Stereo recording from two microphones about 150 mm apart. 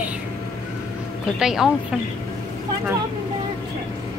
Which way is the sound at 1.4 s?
5° right (ahead or behind).